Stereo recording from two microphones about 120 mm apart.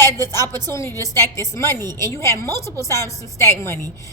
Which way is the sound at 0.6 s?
25° left (ahead or behind).